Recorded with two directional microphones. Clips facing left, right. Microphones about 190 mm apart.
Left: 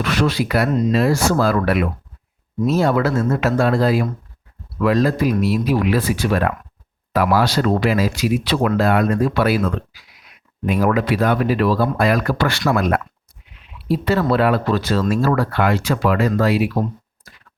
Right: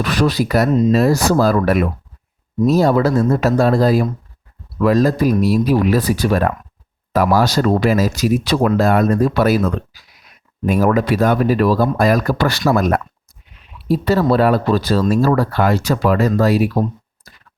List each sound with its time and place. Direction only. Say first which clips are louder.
0.0 s speech: right 2 dB; 40° right (ahead or behind)